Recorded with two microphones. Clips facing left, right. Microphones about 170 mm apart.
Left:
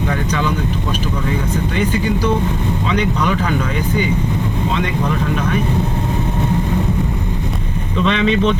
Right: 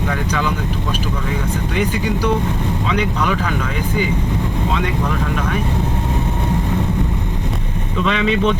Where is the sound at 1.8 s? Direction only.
10° right (ahead or behind).